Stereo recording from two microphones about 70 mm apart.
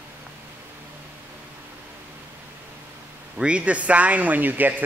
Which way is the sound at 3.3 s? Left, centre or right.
Centre.